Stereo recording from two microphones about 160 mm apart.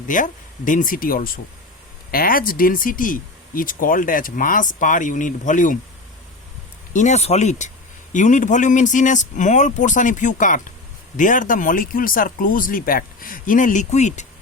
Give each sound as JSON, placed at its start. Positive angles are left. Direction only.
{"t": 0.1, "sound": "speech", "side_deg": 55}
{"t": 6.9, "sound": "speech", "side_deg": 50}